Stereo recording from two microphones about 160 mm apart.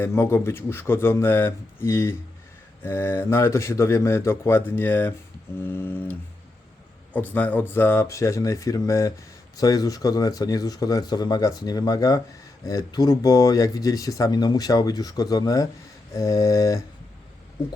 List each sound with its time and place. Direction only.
0.0 s a man's voice: 15° left (ahead or behind)